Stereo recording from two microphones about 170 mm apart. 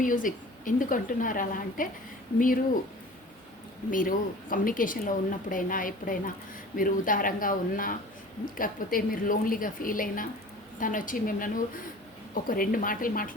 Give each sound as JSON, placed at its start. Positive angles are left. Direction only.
{"t": 0.0, "sound": "a woman's voice", "side_deg": 50}
{"t": 3.9, "sound": "a woman's voice", "side_deg": 55}